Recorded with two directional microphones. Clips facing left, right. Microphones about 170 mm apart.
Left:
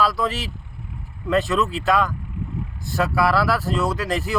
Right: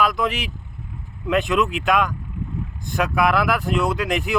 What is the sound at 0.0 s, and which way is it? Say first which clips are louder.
Speech: right 1 dB; 15° right (ahead or behind).